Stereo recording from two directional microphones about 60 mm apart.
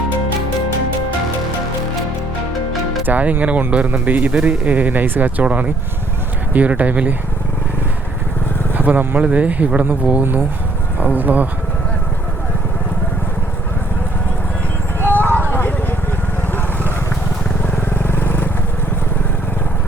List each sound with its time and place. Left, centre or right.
3.1 s speech: right
8.7 s speech: right
15.0 s vehicle: left
17.8 s vehicle: left